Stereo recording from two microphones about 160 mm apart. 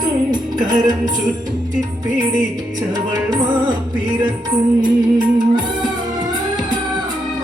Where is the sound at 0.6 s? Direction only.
25° right (ahead or behind).